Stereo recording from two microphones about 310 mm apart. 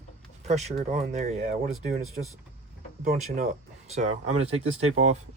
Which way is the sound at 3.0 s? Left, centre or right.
Right.